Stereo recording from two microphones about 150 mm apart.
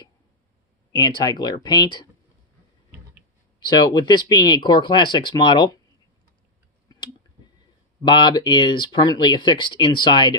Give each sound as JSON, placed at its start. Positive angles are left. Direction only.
{"t": 0.9, "sound": "speech", "side_deg": 25}
{"t": 3.5, "sound": "speech", "side_deg": 25}
{"t": 8.0, "sound": "speech", "side_deg": 30}